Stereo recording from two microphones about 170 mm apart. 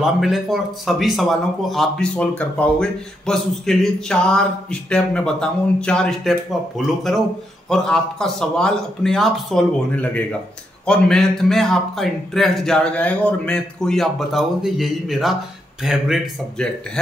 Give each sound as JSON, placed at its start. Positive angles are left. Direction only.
{"t": 0.0, "sound": "speech", "side_deg": 0}
{"t": 7.7, "sound": "speech", "side_deg": 5}